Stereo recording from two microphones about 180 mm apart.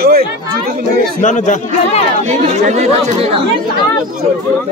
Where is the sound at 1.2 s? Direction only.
40° left (ahead or behind).